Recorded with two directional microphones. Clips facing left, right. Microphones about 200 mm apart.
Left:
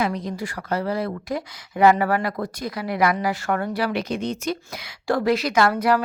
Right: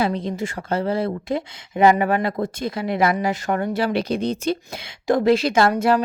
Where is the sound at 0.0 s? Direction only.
25° right (ahead or behind).